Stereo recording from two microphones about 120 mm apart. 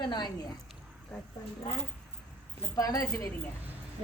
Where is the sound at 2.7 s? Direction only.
30° left (ahead or behind).